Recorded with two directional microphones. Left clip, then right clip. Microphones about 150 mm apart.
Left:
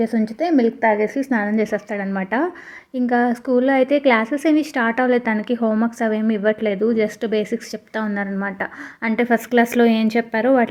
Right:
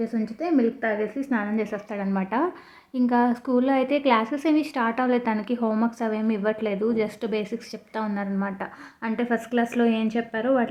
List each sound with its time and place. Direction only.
0.0 s a woman's voice: 30° left (ahead or behind)